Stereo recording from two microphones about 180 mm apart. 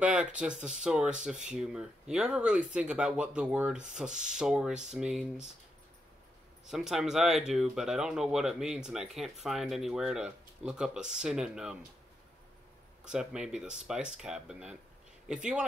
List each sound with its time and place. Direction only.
0.0 s speech: 5° right (ahead or behind)
6.7 s speech: centre (ahead or behind)
13.0 s speech: 5° right (ahead or behind)